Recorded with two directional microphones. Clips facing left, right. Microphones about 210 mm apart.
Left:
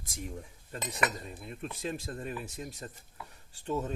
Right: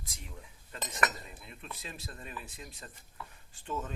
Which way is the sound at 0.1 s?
50° left (ahead or behind).